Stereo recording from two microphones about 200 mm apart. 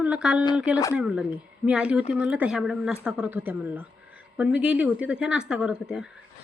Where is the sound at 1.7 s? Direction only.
5° right (ahead or behind).